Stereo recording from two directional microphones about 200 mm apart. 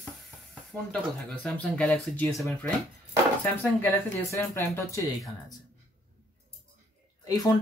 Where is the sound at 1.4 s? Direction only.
5° left (ahead or behind).